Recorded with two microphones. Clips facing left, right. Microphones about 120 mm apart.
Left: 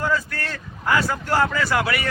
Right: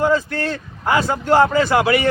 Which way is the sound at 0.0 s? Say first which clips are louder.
Right 7 dB; 25° right (ahead or behind).